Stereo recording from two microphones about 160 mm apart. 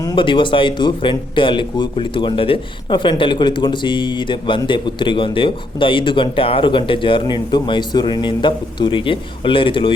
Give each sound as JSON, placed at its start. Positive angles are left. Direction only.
{"t": 0.0, "sound": "speech", "side_deg": 25}